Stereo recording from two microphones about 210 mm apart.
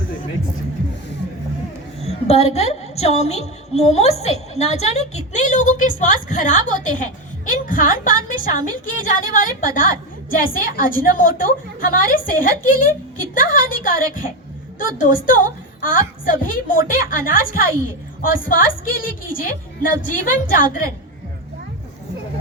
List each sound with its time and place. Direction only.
2.0 s a woman's voice: 30° left (ahead or behind)